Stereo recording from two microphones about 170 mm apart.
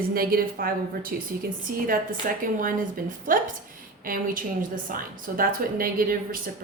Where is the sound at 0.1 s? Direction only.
60° right (ahead or behind).